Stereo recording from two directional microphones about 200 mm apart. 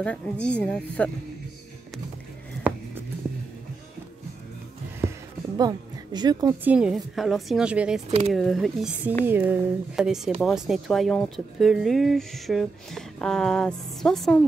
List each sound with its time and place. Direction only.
0.0 s a woman's voice: 5° left (ahead or behind)
5.0 s a sound: 10° right (ahead or behind)
5.6 s a woman's voice: 20° right (ahead or behind)
6.6 s speech: 5° right (ahead or behind)